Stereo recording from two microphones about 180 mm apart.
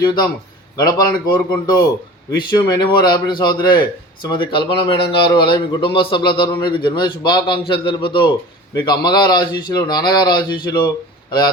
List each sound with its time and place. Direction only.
0.8 s a man's voice: 20° left (ahead or behind)